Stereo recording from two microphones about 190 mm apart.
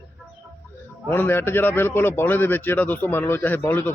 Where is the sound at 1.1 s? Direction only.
10° left (ahead or behind).